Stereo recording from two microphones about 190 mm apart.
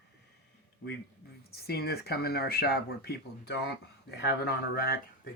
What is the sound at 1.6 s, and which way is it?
Speech, 55° left (ahead or behind).